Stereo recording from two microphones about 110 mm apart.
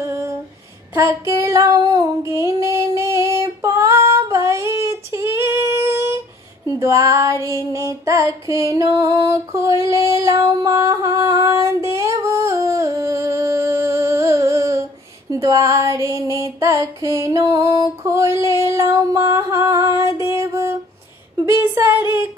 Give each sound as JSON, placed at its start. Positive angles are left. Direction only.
{"t": 0.0, "sound": "a sound", "side_deg": -20}
{"t": 0.9, "sound": "female singing", "side_deg": -25}
{"t": 7.5, "sound": "music", "side_deg": -30}
{"t": 15.3, "sound": "female singing", "side_deg": -30}
{"t": 20.2, "sound": "music", "side_deg": -25}
{"t": 21.5, "sound": "female singing", "side_deg": -20}